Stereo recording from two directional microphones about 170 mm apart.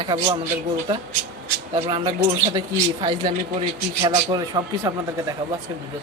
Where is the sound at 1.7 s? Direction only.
25° right (ahead or behind).